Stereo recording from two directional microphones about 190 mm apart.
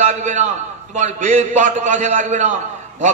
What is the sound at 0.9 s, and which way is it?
A man's voice, 40° right (ahead or behind).